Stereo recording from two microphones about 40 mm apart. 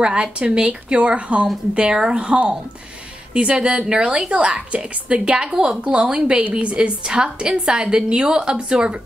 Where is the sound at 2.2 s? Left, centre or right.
Right.